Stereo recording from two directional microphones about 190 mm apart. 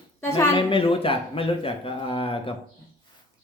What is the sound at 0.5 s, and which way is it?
Mantra, 30° left (ahead or behind).